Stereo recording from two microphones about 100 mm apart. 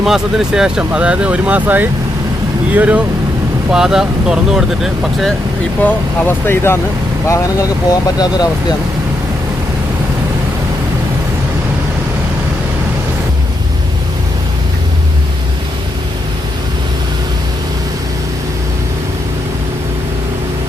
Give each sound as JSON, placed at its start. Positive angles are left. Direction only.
{"t": 0.0, "sound": "speech", "side_deg": -5}
{"t": 5.8, "sound": "speech", "side_deg": 20}
{"t": 7.3, "sound": "speech", "side_deg": 35}